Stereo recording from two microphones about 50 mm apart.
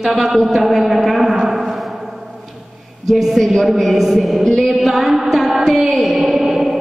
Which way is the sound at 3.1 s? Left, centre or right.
Centre.